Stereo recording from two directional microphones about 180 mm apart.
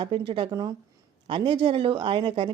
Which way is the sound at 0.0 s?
25° right (ahead or behind).